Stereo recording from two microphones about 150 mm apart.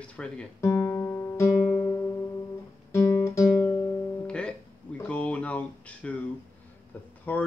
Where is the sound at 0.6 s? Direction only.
20° left (ahead or behind).